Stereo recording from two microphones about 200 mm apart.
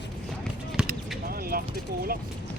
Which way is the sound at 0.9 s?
45° right (ahead or behind).